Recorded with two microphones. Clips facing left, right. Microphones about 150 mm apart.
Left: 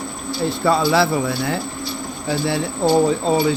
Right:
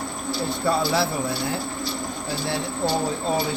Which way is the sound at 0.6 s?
85° left.